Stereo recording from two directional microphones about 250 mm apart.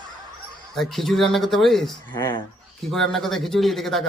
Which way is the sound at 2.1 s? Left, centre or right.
Centre.